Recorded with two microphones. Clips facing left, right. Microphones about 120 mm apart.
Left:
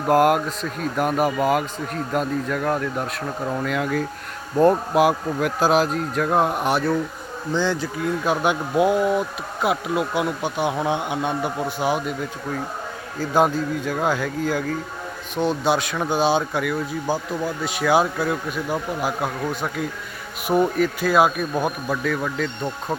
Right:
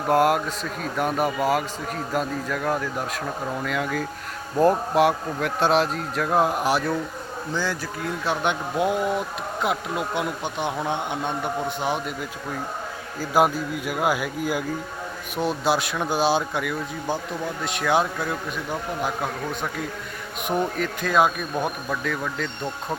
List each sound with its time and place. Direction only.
0.1 s speech: centre (ahead or behind)
7.5 s speech: 20° left (ahead or behind)
8.2 s speech: 5° left (ahead or behind)
13.1 s speech: 5° right (ahead or behind)
15.4 s speech: centre (ahead or behind)
20.5 s speech: 5° left (ahead or behind)